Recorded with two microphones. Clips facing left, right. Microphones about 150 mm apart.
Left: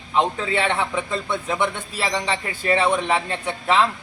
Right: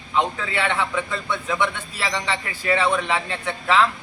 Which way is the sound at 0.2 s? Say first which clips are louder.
Left 2 dB; 20° left (ahead or behind).